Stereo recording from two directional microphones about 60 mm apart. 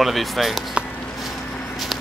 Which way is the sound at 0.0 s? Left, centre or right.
Centre.